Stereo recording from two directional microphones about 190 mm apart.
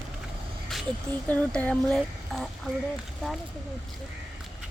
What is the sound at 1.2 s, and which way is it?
A woman's voice, 10° left (ahead or behind).